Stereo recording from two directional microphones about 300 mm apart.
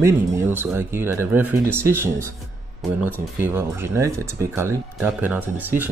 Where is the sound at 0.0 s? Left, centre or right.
Centre.